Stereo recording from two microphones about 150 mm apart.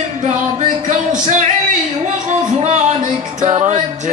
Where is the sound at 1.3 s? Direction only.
55° right (ahead or behind).